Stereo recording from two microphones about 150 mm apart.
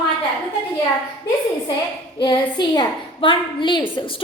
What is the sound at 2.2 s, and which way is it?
A woman's voice, 30° left (ahead or behind).